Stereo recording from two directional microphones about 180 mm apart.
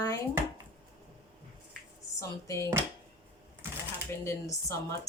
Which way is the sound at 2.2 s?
15° left (ahead or behind).